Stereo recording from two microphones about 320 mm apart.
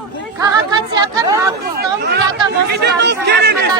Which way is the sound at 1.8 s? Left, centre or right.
Right.